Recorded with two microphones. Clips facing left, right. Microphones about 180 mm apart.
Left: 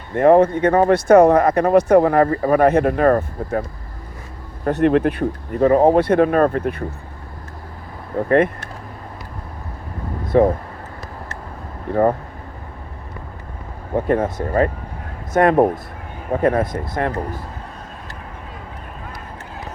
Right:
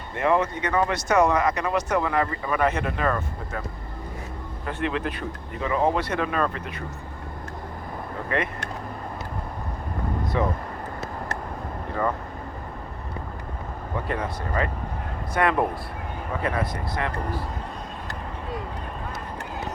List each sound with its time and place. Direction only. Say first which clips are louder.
0.1 s speech: left 10 dB; 50° left (ahead or behind)
4.6 s speech: left 12 dB; 45° left (ahead or behind)
10.3 s speech: left 12 dB; 50° left (ahead or behind)
13.9 s speech: left 11 dB; 50° left (ahead or behind)